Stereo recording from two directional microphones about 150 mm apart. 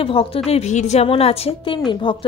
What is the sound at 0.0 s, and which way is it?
A woman's voice, 40° left (ahead or behind).